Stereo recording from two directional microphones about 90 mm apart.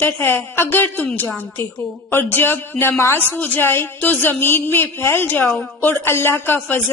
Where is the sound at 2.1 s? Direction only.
25° left (ahead or behind).